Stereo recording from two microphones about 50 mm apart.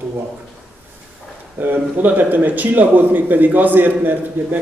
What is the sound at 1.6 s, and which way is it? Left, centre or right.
A man's voice, right.